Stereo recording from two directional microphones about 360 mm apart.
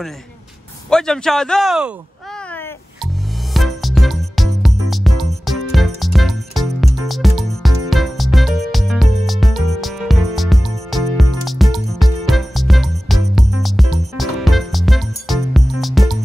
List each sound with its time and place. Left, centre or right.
0.8 s a man's voice: centre
3.5 s music: centre